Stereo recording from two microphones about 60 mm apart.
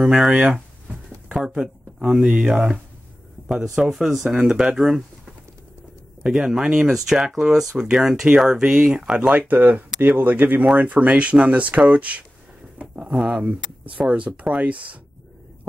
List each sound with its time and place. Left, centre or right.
0.1 s speech: centre
6.2 s speech: centre
9.3 s speech: right